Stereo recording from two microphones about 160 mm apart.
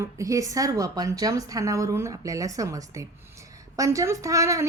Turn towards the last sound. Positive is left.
turn(degrees=-20)  # may be behind; listen again after turning